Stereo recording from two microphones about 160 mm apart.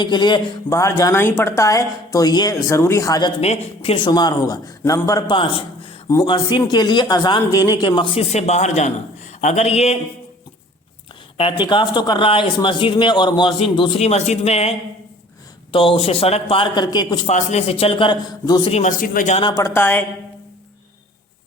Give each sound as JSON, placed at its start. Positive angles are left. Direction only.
{"t": 0.0, "sound": "a woman's voice", "side_deg": 30}
{"t": 3.4, "sound": "a man's voice", "side_deg": 40}
{"t": 3.9, "sound": "a woman's voice", "side_deg": 25}
{"t": 5.4, "sound": "a man's voice", "side_deg": 35}
{"t": 11.3, "sound": "speech", "side_deg": 30}
{"t": 17.2, "sound": "speech", "side_deg": 45}
{"t": 18.7, "sound": "a man's voice", "side_deg": 50}
{"t": 19.3, "sound": "speech", "side_deg": 35}
{"t": 19.5, "sound": "speech", "side_deg": 15}